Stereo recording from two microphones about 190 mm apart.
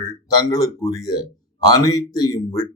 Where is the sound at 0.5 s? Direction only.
20° left (ahead or behind).